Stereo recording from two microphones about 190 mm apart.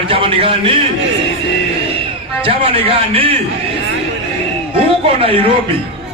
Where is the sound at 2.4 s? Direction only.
30° right (ahead or behind).